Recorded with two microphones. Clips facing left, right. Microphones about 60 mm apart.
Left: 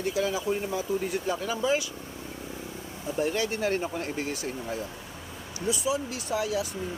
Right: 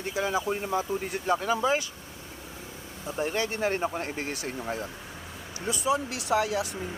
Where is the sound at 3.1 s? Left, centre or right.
Right.